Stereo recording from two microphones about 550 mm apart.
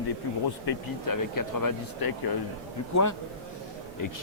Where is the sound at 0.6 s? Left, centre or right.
Left.